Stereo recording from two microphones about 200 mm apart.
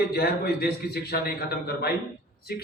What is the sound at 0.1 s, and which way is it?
A man's voice, 50° left (ahead or behind).